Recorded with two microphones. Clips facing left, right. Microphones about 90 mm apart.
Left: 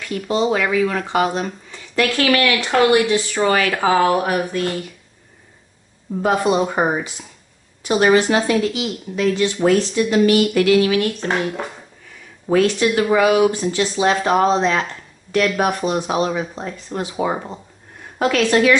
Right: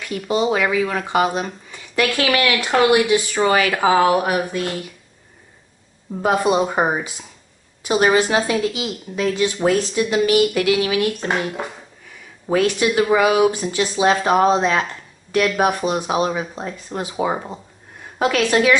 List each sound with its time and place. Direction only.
0.0 s speech: 10° right (ahead or behind)
6.2 s speech: 10° right (ahead or behind)
12.4 s speech: 10° right (ahead or behind)